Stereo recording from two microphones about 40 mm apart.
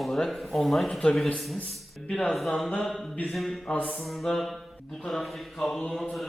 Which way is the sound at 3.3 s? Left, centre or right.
Centre.